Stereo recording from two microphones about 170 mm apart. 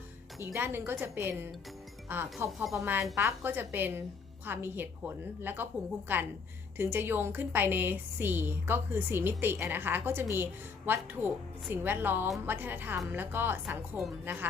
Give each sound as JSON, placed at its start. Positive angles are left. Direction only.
{"t": 0.4, "sound": "a woman's voice", "side_deg": -15}